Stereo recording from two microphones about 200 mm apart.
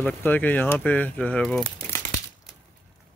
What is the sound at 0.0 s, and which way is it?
Speech, 10° left (ahead or behind).